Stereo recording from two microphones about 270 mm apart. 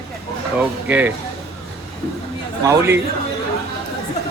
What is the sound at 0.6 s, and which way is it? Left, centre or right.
Speech, centre.